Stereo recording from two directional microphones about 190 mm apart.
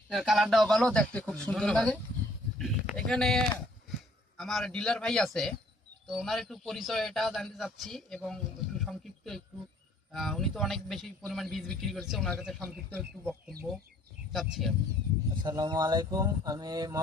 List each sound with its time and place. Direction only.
0.1 s a man's voice: centre (ahead or behind)
8.8 s a sound: centre (ahead or behind)
10.1 s a man's voice: centre (ahead or behind)
14.3 s a man's voice: centre (ahead or behind)
15.4 s speech: 20° right (ahead or behind)